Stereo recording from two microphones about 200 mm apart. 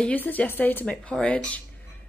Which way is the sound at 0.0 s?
10° left (ahead or behind).